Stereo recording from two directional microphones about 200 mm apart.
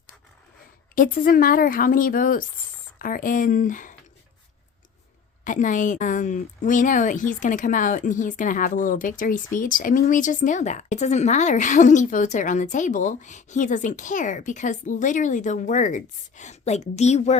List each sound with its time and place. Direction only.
0.9 s speech: 45° left (ahead or behind)
5.5 s speech: 40° left (ahead or behind)